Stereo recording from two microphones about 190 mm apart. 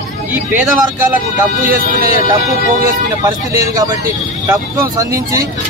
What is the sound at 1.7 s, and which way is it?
Speech, 50° right (ahead or behind).